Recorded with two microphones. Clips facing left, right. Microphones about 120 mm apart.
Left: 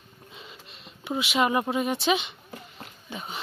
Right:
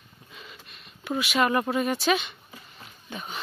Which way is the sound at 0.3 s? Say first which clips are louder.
Even; 25° left (ahead or behind).